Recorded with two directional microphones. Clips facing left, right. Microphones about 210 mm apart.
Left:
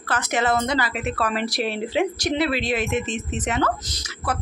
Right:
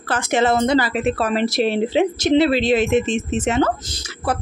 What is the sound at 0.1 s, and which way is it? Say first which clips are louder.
Speech: right 4 dB; 25° right (ahead or behind).